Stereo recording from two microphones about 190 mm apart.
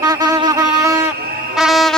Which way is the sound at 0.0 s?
20° right (ahead or behind).